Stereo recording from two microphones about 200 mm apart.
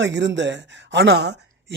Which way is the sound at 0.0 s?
65° right (ahead or behind).